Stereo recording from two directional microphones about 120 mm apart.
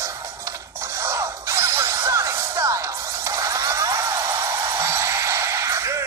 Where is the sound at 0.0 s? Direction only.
25° right (ahead or behind).